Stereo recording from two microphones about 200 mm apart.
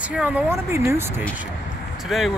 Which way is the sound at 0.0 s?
5° right (ahead or behind).